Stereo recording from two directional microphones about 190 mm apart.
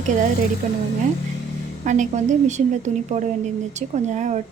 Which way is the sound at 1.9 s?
40° right (ahead or behind).